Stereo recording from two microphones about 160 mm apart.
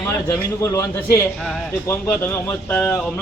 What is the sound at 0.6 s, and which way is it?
A man's voice, 20° left (ahead or behind).